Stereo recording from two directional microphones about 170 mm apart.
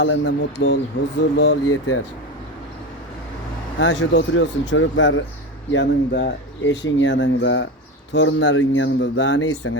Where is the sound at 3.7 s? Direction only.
90° left.